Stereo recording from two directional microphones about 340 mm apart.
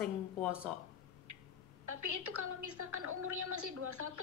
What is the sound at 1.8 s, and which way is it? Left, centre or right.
A woman's voice, right.